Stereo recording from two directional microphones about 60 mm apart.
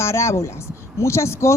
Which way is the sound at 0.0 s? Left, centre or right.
Left.